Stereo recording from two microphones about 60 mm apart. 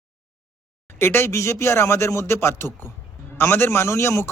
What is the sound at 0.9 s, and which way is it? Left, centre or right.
A man's voice, left.